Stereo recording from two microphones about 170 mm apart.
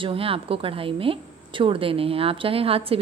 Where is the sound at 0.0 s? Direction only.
30° right (ahead or behind).